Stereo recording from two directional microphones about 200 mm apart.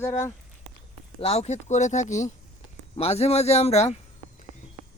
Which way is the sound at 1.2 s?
30° left (ahead or behind).